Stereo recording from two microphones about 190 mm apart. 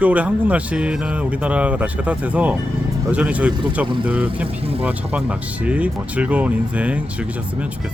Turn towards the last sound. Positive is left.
turn(degrees=-5)  # may be behind; listen again after turning